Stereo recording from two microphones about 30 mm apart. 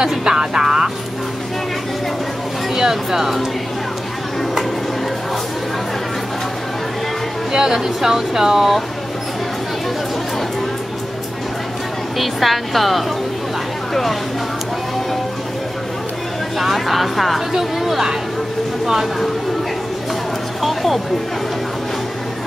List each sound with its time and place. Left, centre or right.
0.0 s music: right
2.7 s speech: centre
7.5 s speech: centre
12.2 s a woman's voice: centre
16.5 s a woman's voice: centre
20.6 s a sound: centre